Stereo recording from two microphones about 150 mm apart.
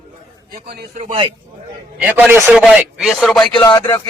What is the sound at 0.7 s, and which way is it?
Speech, 90° right.